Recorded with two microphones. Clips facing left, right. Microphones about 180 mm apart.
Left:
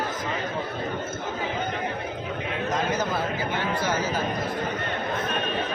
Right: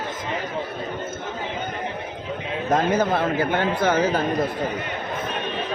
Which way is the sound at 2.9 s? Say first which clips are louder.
Right 6 dB; 55° right (ahead or behind).